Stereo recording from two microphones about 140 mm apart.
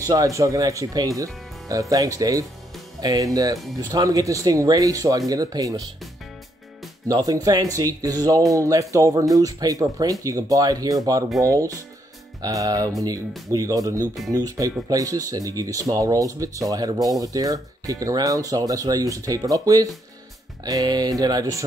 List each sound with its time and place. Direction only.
0.0 s speech: 25° right (ahead or behind)
7.1 s speech: 25° right (ahead or behind)